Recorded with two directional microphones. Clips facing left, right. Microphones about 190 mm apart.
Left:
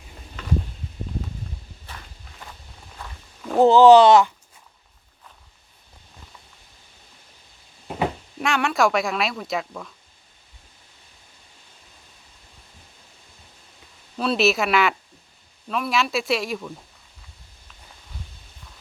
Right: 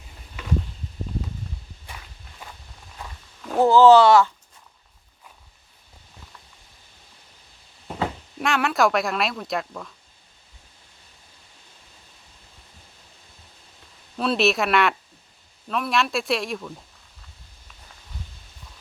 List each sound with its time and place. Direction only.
3.6 s speech: 15° left (ahead or behind)
8.4 s speech: centre (ahead or behind)
14.2 s speech: centre (ahead or behind)